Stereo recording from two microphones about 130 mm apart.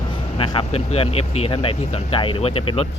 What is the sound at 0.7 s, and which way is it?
Speech, 55° left (ahead or behind).